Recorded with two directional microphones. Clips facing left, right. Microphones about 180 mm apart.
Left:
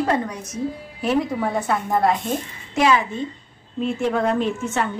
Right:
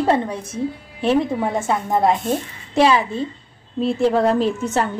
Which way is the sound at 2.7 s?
30° right (ahead or behind).